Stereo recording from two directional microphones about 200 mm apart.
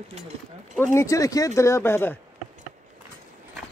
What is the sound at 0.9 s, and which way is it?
Speech, 15° left (ahead or behind).